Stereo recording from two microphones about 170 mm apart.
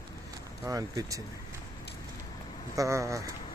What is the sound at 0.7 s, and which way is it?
Speech, 20° right (ahead or behind).